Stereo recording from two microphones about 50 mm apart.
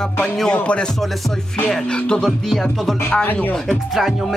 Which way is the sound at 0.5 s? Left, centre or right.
Centre.